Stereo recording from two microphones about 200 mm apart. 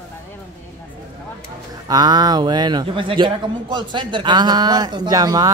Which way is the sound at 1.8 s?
20° right (ahead or behind).